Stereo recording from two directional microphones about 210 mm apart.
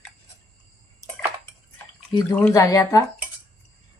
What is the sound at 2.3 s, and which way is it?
Speech, 10° left (ahead or behind).